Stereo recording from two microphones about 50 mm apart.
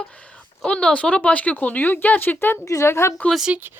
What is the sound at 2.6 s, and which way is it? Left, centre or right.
Speech, left.